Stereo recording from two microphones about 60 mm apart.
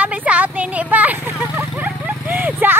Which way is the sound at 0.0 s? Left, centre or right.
Right.